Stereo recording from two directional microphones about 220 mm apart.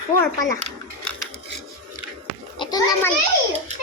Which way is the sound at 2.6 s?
15° left (ahead or behind).